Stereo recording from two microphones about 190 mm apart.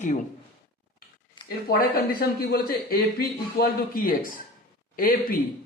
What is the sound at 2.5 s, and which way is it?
A man's voice, 55° left (ahead or behind).